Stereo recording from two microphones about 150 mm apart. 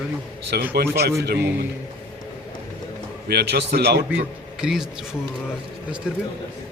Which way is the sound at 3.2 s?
90° right.